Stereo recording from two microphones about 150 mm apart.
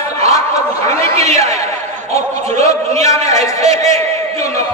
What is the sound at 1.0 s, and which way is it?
Speech, 45° right (ahead or behind).